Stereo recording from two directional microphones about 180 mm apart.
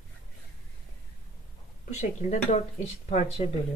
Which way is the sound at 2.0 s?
40° left (ahead or behind).